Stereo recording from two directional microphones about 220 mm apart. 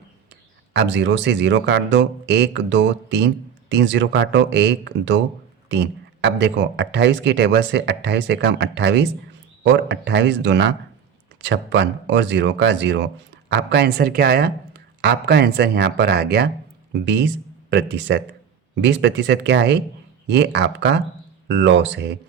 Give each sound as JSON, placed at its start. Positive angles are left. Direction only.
{"t": 0.7, "sound": "speech", "side_deg": -50}